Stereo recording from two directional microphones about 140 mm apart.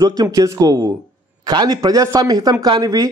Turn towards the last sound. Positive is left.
turn(degrees=-30)  # may be behind; listen again after turning